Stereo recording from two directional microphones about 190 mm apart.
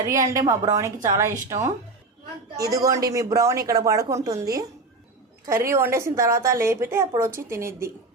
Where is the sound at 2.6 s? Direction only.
20° right (ahead or behind).